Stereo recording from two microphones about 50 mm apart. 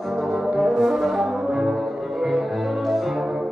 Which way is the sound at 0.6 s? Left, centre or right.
Centre.